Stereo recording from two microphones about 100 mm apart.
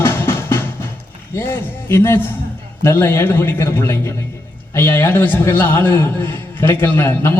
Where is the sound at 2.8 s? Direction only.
25° left (ahead or behind).